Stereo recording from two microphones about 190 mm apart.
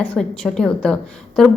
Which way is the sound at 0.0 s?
5° left (ahead or behind).